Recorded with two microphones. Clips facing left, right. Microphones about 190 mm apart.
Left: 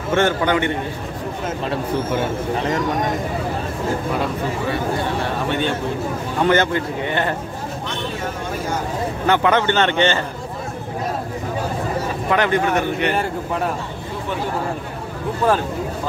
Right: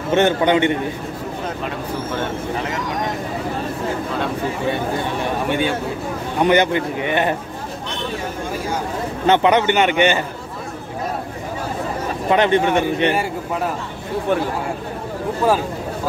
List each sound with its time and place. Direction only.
0.1 s speech: 20° right (ahead or behind)
5.2 s a man's voice: 10° right (ahead or behind)
9.2 s a man's voice: 20° right (ahead or behind)
12.3 s speech: 20° right (ahead or behind)
13.1 s a man's voice: 5° right (ahead or behind)